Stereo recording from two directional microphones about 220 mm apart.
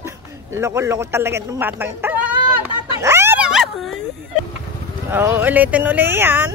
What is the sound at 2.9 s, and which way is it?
Dog, 10° right (ahead or behind).